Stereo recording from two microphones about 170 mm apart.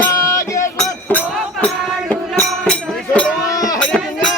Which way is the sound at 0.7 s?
5° left (ahead or behind).